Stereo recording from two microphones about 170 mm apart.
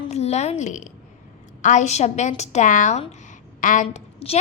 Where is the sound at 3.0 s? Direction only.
45° left (ahead or behind).